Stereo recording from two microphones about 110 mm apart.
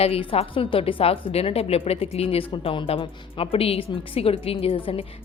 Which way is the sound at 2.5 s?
50° left (ahead or behind).